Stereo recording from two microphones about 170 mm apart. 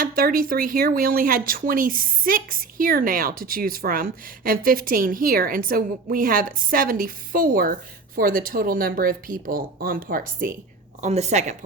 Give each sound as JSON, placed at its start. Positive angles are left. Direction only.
{"t": 0.0, "sound": "speech", "side_deg": -55}
{"t": 11.0, "sound": "speech", "side_deg": -40}